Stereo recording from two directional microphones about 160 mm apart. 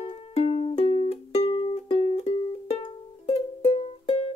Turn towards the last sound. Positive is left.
turn(degrees=40)  # may be behind; listen again after turning